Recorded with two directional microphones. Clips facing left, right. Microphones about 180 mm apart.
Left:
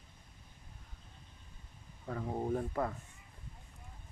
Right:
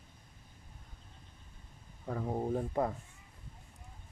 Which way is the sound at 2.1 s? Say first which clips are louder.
Right 1 dB; 10° right (ahead or behind).